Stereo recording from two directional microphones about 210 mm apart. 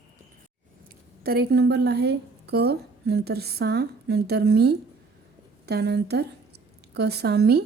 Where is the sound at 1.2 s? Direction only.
50° right (ahead or behind).